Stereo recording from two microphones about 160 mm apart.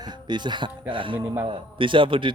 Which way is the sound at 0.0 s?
25° right (ahead or behind).